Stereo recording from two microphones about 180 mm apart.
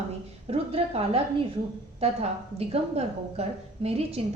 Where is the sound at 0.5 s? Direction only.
35° right (ahead or behind).